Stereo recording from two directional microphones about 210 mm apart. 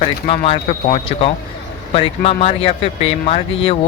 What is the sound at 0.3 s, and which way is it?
Speech, 30° left (ahead or behind).